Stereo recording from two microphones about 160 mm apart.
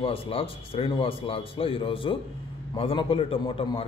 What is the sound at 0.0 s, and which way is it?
A man's voice, 35° left (ahead or behind).